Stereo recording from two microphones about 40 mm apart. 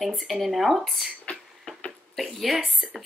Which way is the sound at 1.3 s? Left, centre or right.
Left.